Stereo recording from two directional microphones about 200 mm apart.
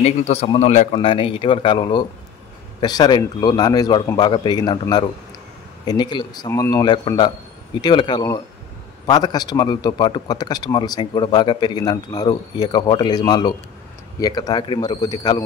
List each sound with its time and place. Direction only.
0.0 s a man's voice: 30° left (ahead or behind)